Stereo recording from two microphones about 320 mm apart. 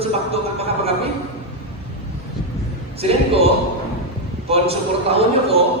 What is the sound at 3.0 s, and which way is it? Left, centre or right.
A man's voice, centre.